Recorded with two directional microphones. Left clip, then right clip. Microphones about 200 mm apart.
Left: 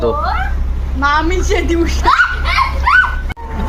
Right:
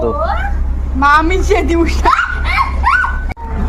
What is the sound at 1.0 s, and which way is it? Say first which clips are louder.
Speech: right 4 dB; 65° right (ahead or behind).